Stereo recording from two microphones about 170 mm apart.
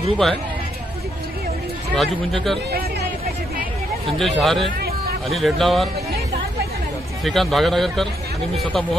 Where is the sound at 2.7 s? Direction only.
65° right (ahead or behind).